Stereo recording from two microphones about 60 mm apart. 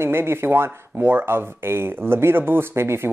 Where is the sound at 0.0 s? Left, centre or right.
Right.